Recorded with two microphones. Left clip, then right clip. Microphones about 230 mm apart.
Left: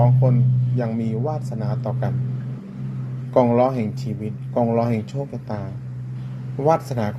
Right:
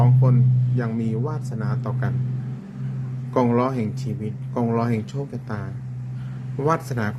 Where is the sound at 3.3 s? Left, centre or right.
Centre.